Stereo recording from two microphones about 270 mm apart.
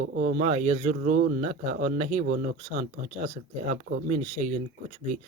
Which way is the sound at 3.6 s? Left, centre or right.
Right.